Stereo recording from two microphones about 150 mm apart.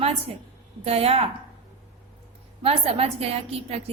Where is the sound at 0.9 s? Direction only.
40° right (ahead or behind).